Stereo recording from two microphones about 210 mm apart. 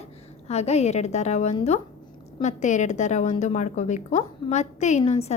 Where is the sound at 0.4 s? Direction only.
30° left (ahead or behind).